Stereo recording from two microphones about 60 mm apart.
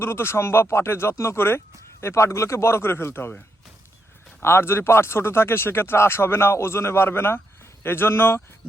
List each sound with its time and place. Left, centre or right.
0.0 s speech: left
4.4 s speech: left